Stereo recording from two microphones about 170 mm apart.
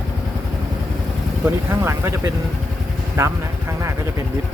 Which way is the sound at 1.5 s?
15° right (ahead or behind).